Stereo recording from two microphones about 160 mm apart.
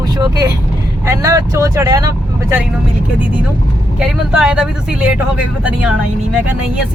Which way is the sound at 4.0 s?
5° right (ahead or behind).